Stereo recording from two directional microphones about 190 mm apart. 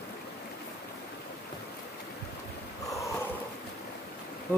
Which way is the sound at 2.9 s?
15° left (ahead or behind).